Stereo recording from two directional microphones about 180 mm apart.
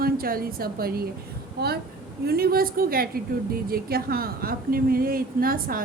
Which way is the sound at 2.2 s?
60° right (ahead or behind).